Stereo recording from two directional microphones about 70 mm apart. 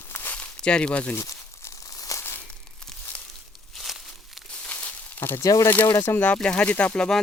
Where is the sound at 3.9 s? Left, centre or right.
Centre.